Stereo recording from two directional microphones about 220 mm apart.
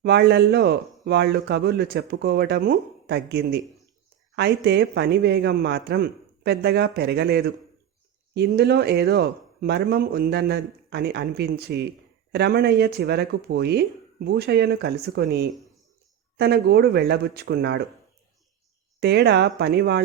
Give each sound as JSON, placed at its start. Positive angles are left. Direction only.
{"t": 0.0, "sound": "a man's voice", "side_deg": -50}
{"t": 18.9, "sound": "a man's voice", "side_deg": -50}